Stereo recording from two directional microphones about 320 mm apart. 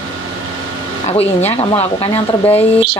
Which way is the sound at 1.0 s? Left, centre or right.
Centre.